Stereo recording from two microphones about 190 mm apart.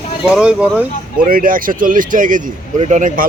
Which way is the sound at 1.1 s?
50° right (ahead or behind).